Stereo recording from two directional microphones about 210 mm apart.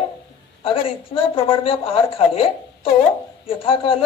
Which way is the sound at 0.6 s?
25° left (ahead or behind).